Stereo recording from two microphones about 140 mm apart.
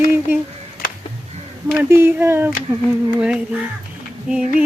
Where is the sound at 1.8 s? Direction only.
15° right (ahead or behind).